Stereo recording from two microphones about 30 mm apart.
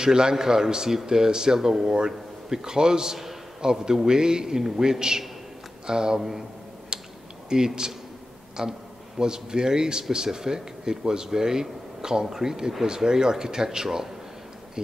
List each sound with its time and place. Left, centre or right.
0.0 s a man's voice: right
6.9 s a sound: right
7.4 s speech: right